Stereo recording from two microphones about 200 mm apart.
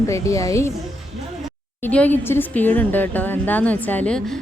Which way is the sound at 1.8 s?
10° left (ahead or behind).